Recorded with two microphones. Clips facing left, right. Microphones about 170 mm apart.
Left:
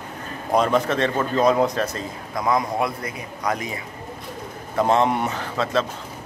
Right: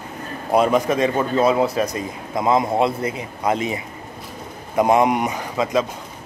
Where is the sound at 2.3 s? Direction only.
25° right (ahead or behind).